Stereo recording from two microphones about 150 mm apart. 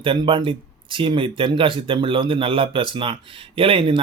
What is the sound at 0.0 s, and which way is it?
Speech, 35° right (ahead or behind).